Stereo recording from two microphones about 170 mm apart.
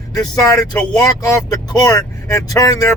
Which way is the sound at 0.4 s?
20° left (ahead or behind).